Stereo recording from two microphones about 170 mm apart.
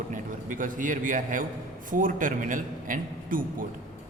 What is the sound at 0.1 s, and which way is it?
A man's voice, 50° right (ahead or behind).